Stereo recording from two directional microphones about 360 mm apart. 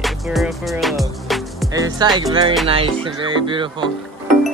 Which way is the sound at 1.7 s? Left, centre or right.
Centre.